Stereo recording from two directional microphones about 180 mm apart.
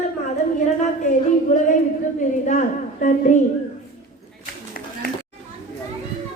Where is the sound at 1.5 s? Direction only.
40° left (ahead or behind).